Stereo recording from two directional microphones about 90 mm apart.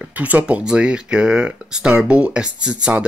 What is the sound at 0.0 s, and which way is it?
Speech, 15° right (ahead or behind).